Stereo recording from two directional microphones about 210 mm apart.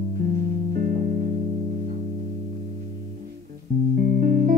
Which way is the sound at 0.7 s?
40° right (ahead or behind).